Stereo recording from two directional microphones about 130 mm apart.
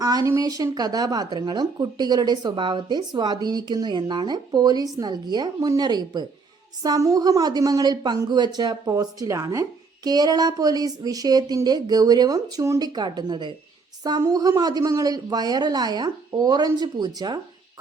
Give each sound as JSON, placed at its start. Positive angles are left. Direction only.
{"t": 0.0, "sound": "a woman's voice", "side_deg": -30}